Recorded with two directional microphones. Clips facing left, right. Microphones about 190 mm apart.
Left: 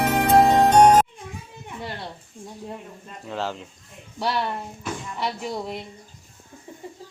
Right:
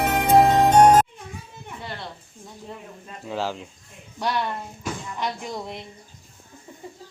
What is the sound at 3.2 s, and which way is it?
Speech, 5° right (ahead or behind).